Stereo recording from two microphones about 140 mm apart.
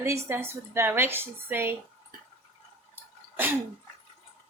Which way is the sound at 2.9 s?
15° right (ahead or behind).